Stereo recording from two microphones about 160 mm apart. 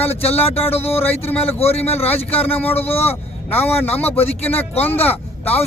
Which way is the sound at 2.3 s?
10° left (ahead or behind).